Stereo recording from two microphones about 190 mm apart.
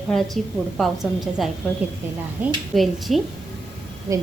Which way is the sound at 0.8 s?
Centre (ahead or behind).